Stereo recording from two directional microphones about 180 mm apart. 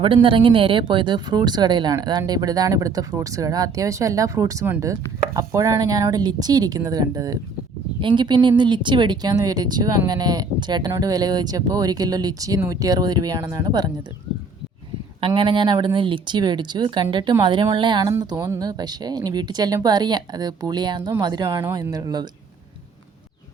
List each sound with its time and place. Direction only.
0.0 s speech: 30° right (ahead or behind)
15.4 s speech: 25° right (ahead or behind)